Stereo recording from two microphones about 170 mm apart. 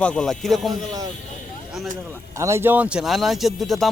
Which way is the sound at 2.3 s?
15° right (ahead or behind).